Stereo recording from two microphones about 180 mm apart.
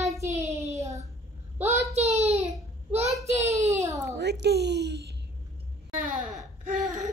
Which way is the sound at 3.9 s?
15° right (ahead or behind).